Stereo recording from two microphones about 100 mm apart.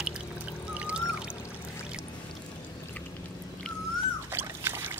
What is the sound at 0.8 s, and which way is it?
Music, 10° right (ahead or behind).